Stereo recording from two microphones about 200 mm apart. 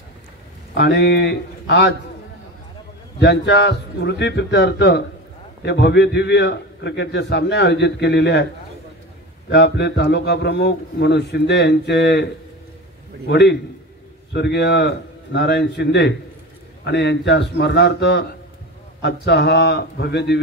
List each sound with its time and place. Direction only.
0.7 s a man's voice: 60° left (ahead or behind)
3.2 s a man's voice: 60° left (ahead or behind)
9.5 s a man's voice: 60° left (ahead or behind)
13.3 s a man's voice: 55° left (ahead or behind)